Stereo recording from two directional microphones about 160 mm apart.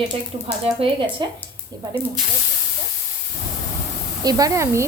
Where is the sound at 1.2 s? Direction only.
30° right (ahead or behind).